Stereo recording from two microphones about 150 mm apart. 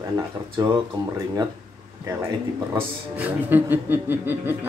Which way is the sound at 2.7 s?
15° right (ahead or behind).